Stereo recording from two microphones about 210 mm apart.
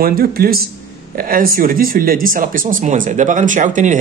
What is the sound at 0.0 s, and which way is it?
Speech, 45° right (ahead or behind).